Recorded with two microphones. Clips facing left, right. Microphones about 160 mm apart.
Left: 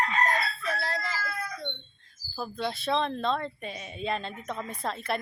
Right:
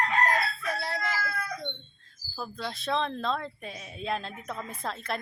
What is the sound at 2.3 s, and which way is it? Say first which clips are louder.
Speech: left 4 dB; 5° left (ahead or behind).